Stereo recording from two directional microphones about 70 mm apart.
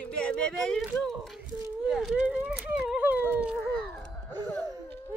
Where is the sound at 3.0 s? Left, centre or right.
Right.